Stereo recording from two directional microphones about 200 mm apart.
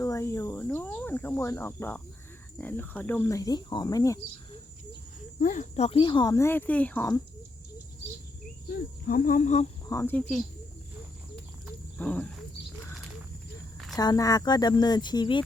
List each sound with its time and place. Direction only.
0.0 s speech: 15° left (ahead or behind)
5.4 s speech: 40° left (ahead or behind); by 7.2 s 10° left (ahead or behind)
9.0 s speech: 45° left (ahead or behind)
9.8 s speech: 15° left (ahead or behind)
11.9 s speech: 5° left (ahead or behind)
13.9 s speech: 20° left (ahead or behind)